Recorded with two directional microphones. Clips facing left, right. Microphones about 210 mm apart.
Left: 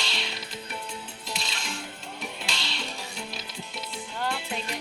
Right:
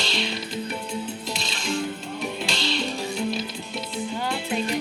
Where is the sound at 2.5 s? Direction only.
30° right (ahead or behind).